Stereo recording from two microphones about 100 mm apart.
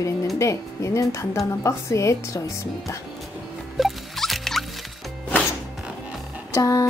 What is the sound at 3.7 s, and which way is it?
Rodents, centre (ahead or behind).